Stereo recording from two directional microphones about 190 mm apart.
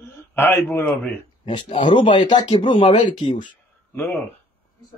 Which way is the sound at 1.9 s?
25° left (ahead or behind).